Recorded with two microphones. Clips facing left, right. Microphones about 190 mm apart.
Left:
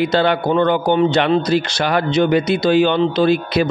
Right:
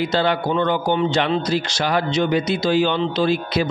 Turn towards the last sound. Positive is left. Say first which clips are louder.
# left 4 dB
turn(degrees=60)  # may be behind; listen again after turning